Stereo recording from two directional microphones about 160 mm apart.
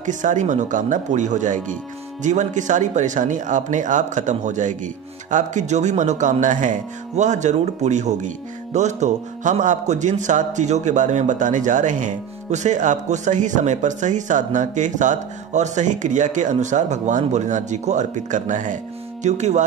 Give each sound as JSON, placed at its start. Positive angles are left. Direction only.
{"t": 0.0, "sound": "a man's voice", "side_deg": -50}